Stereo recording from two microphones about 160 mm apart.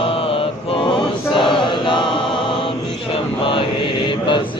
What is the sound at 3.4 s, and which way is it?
Mantra, 35° left (ahead or behind).